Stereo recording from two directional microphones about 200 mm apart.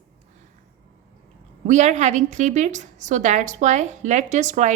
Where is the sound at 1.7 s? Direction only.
35° right (ahead or behind).